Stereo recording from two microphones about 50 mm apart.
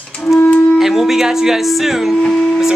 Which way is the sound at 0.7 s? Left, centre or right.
Centre.